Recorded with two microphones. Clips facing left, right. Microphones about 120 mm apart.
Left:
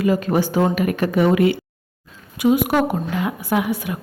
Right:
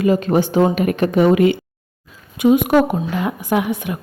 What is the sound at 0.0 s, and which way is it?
A woman's voice, 25° right (ahead or behind).